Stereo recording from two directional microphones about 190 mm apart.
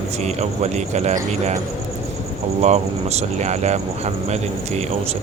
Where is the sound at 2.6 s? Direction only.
35° right (ahead or behind).